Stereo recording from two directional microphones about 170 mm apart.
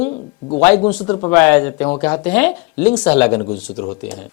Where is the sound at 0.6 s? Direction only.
10° left (ahead or behind).